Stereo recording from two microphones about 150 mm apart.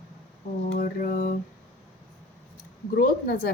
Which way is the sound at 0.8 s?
75° left (ahead or behind).